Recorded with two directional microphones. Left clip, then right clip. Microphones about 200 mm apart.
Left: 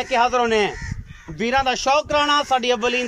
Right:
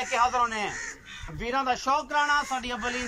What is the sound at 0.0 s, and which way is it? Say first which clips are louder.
Speech: left 6 dB; 50° left (ahead or behind).